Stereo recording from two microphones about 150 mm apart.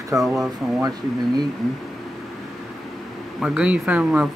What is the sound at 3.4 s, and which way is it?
Speech, 5° right (ahead or behind).